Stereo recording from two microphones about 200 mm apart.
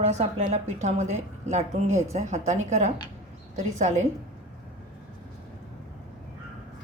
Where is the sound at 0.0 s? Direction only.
35° right (ahead or behind).